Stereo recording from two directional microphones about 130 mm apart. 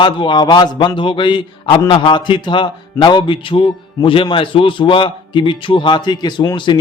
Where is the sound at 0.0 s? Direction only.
40° left (ahead or behind).